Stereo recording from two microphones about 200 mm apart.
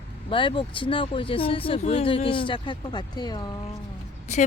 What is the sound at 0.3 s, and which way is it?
Speech, 25° left (ahead or behind).